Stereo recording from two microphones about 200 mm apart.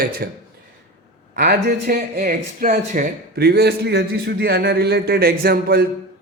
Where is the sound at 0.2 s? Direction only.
50° right (ahead or behind).